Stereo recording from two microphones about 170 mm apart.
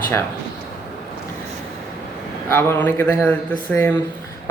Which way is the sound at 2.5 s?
15° left (ahead or behind).